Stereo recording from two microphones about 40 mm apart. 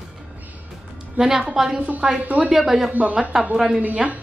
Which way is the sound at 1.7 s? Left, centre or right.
Right.